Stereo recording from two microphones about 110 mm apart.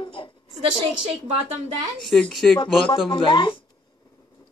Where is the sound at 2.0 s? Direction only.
5° left (ahead or behind).